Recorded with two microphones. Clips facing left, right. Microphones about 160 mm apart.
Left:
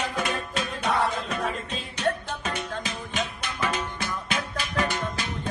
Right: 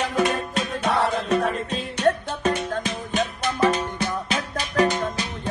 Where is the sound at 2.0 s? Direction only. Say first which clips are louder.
Right 6 dB; 45° right (ahead or behind).